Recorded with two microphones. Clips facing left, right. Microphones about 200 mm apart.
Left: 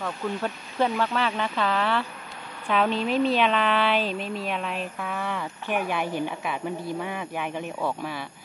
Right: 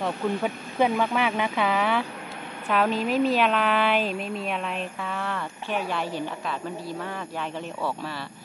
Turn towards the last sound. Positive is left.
turn(degrees=10)  # may be behind; listen again after turning